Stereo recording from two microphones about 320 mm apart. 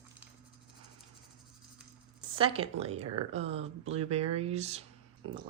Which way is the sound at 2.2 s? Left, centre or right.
Centre.